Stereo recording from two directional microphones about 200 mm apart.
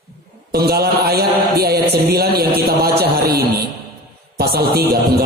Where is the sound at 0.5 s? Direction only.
50° right (ahead or behind).